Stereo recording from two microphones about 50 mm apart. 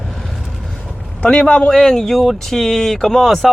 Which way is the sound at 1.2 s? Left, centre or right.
Centre.